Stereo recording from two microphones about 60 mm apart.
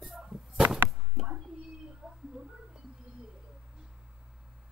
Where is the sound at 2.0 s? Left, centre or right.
Right.